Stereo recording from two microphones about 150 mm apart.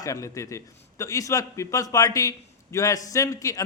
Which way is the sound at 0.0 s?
20° left (ahead or behind).